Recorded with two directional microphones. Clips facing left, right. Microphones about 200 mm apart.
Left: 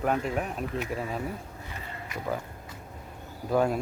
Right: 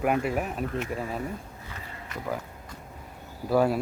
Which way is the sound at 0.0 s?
10° right (ahead or behind).